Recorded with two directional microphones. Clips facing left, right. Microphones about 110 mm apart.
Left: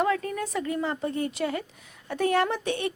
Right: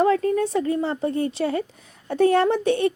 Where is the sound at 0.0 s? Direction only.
35° right (ahead or behind).